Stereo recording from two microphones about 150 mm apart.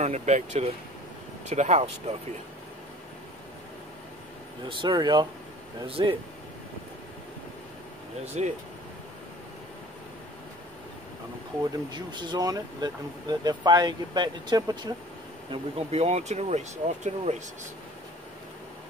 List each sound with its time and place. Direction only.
0.0 s speech: 50° right (ahead or behind)
4.6 s speech: 30° right (ahead or behind)
8.4 s speech: 50° right (ahead or behind)
11.6 s speech: 30° right (ahead or behind)
15.5 s speech: 45° right (ahead or behind)